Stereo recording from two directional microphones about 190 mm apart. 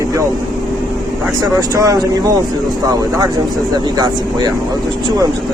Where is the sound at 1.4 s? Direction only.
20° right (ahead or behind).